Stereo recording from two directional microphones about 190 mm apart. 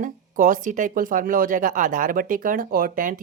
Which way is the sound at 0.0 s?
45° right (ahead or behind).